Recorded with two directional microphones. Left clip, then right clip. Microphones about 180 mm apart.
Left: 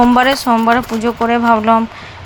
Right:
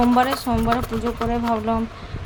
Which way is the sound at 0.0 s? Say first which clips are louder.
Left 8 dB; 15° left (ahead or behind).